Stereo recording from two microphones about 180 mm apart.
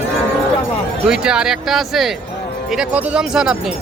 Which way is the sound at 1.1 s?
5° right (ahead or behind).